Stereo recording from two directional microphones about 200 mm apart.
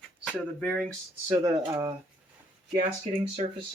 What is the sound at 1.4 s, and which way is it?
Speech, 15° right (ahead or behind).